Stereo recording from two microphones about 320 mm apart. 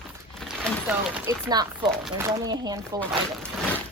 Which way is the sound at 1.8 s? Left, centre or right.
Centre.